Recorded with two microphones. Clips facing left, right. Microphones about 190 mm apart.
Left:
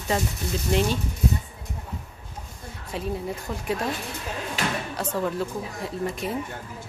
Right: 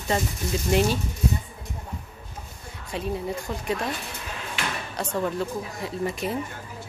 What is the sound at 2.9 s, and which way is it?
Speech, centre (ahead or behind).